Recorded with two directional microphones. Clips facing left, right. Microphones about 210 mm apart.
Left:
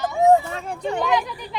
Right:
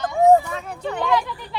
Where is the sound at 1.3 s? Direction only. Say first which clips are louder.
Even; 15° left (ahead or behind).